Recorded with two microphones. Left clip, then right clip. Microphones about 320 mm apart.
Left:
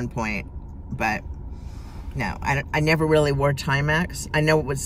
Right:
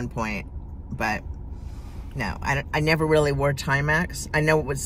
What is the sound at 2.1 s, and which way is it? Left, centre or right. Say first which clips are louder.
Speech: left 1 dB; centre.